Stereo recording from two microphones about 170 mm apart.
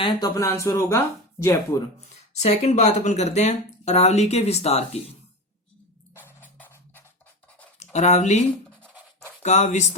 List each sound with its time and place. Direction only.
0.0 s speech: 25° left (ahead or behind)
2.1 s speech: 40° left (ahead or behind)
6.1 s music: 10° left (ahead or behind)
7.9 s speech: 40° left (ahead or behind)